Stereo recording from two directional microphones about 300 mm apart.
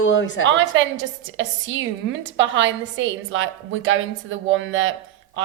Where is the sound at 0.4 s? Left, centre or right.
Right.